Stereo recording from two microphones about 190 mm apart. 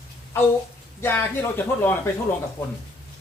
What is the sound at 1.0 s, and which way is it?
Speech, 10° left (ahead or behind).